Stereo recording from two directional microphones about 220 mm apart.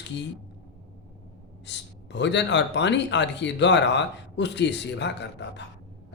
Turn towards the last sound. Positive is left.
turn(degrees=50)  # may be behind; listen again after turning